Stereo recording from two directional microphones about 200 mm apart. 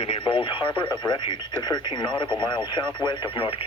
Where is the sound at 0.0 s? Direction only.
30° left (ahead or behind).